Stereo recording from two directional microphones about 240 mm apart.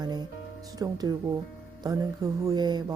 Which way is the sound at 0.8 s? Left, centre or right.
Centre.